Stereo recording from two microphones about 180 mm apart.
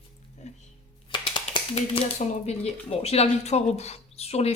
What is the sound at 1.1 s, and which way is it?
Speech, 25° left (ahead or behind).